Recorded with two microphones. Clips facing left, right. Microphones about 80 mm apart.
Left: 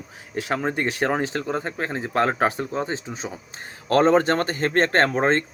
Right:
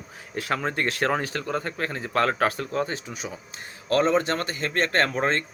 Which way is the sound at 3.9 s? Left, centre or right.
Left.